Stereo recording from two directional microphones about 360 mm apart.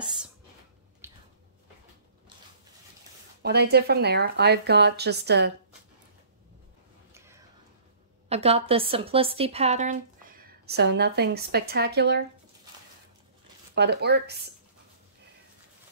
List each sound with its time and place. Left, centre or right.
1.0 s squish: centre
3.4 s a woman's voice: right
8.3 s a woman's voice: centre
13.7 s a woman's voice: right